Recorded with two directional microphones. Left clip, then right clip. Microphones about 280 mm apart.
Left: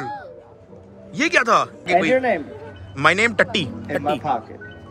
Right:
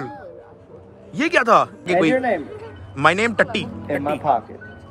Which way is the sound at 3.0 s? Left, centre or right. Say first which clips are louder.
Even; centre.